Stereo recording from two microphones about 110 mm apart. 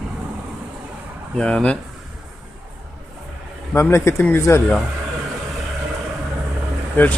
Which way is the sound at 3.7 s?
25° left (ahead or behind).